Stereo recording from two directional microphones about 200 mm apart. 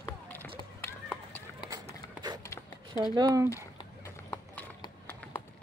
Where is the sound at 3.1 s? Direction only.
20° right (ahead or behind).